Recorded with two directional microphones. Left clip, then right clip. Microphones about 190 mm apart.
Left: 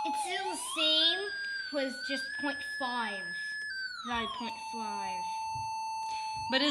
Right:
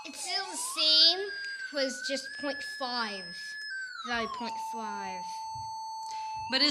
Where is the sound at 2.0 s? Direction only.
45° right (ahead or behind); by 5.1 s 25° right (ahead or behind).